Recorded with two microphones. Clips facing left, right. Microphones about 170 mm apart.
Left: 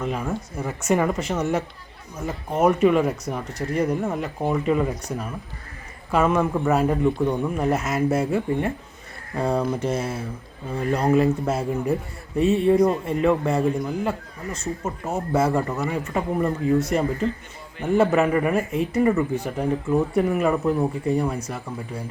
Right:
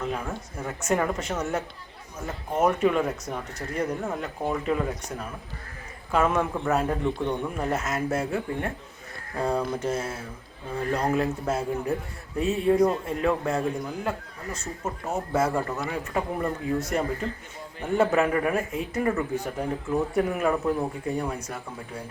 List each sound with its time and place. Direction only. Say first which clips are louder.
0.0 s speech: left 4 dB; 5° left (ahead or behind)